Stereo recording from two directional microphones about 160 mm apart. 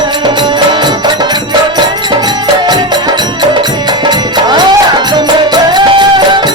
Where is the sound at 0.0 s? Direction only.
30° right (ahead or behind).